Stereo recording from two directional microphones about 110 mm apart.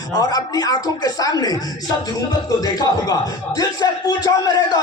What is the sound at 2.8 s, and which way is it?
Speech, 35° left (ahead or behind).